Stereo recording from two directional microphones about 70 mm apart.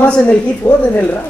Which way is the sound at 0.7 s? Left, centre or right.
Left.